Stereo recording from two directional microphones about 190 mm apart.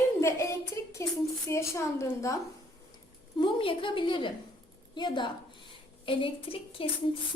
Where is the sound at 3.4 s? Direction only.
25° left (ahead or behind).